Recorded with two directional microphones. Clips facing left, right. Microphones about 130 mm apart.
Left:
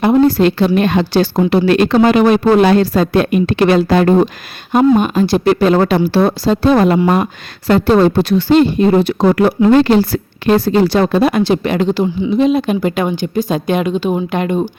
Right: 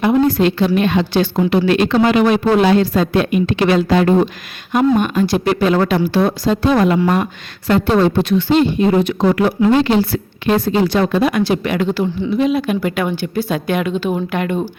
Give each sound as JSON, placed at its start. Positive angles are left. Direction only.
{"t": 0.0, "sound": "a woman's voice", "side_deg": 35}
{"t": 2.8, "sound": "a woman's voice", "side_deg": 35}